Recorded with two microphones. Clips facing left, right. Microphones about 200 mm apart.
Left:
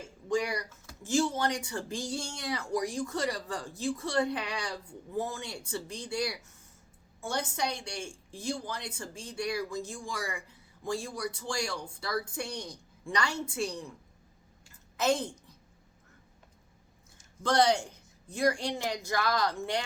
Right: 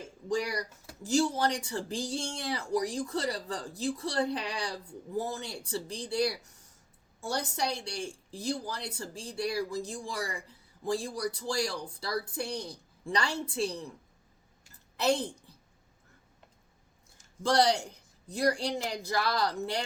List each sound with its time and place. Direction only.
0.9 s speech: 35° right (ahead or behind)
14.7 s a sound: 35° right (ahead or behind)
17.4 s speech: 35° right (ahead or behind)